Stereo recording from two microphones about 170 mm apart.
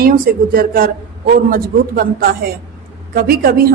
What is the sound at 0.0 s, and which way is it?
A woman's voice, 60° right (ahead or behind).